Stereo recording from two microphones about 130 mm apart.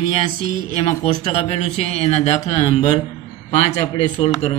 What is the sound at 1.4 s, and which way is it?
Mantra, 55° left (ahead or behind).